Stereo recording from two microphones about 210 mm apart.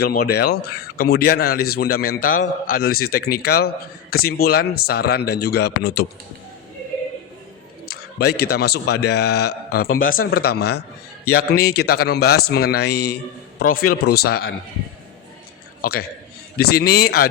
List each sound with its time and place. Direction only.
0.0 s speech: 45° left (ahead or behind)
7.9 s speech: 50° left (ahead or behind)
15.8 s a man's voice: 50° left (ahead or behind)